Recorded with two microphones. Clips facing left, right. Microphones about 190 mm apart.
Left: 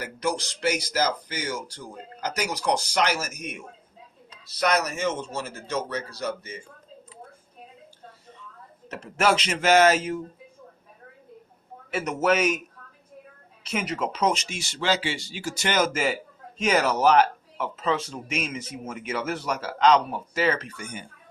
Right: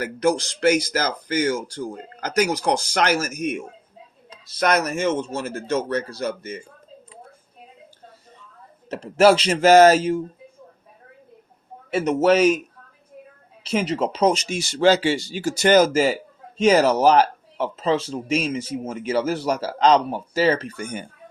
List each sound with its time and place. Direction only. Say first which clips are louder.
0.0 s speech: right 7 dB; 50° right (ahead or behind)
4.6 s speech: right 4 dB; 50° right (ahead or behind)
8.9 s speech: right 8 dB; 35° right (ahead or behind)
11.9 s speech: right 6 dB; 30° right (ahead or behind)
13.7 s speech: right 6 dB; 30° right (ahead or behind)
20.7 s speech: right 7 dB; 45° right (ahead or behind)